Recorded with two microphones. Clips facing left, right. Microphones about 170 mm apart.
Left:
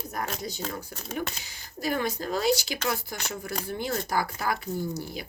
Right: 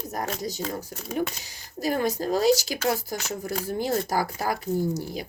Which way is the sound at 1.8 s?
40° right (ahead or behind).